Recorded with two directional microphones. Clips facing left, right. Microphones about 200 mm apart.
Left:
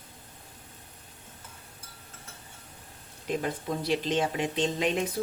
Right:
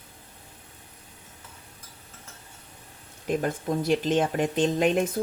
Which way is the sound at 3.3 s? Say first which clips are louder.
Right 4 dB; 50° right (ahead or behind).